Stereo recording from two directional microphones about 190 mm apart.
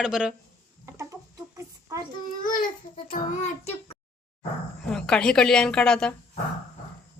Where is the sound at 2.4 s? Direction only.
45° left (ahead or behind).